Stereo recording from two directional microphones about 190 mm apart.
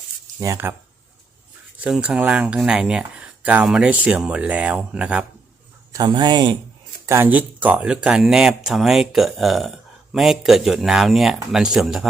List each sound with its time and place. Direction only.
0.3 s speech: 15° right (ahead or behind)
1.8 s speech: 5° right (ahead or behind)
5.9 s speech: 20° right (ahead or behind); by 12.0 s centre (ahead or behind)